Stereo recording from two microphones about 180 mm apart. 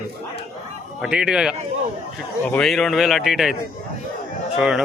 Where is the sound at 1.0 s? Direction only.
5° right (ahead or behind).